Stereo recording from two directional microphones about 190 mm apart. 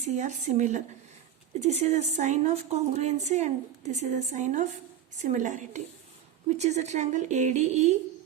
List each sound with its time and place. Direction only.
0.0 s a woman's voice: 40° right (ahead or behind)